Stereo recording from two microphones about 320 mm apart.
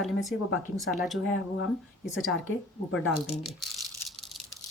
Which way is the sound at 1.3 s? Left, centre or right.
Left.